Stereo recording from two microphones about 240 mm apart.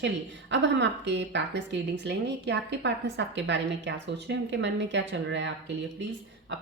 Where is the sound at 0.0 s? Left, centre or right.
Right.